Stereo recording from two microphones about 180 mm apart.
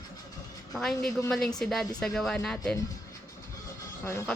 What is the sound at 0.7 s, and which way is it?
Speech, centre (ahead or behind).